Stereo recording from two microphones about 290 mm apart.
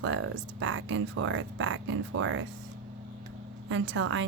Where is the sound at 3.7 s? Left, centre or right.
Right.